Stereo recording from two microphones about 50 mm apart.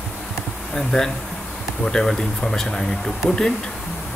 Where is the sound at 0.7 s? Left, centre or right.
Centre.